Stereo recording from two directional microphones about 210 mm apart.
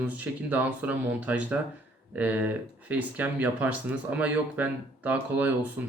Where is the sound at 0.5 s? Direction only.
5° right (ahead or behind).